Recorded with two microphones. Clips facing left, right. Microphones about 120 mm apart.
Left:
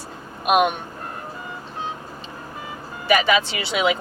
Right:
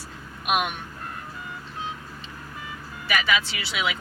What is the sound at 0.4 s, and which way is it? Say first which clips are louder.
Speech: left 7 dB; 35° left (ahead or behind).